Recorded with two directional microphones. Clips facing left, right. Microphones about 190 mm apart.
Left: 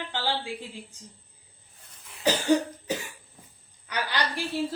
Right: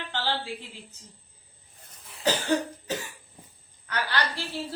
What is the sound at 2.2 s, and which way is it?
Cough, 15° left (ahead or behind).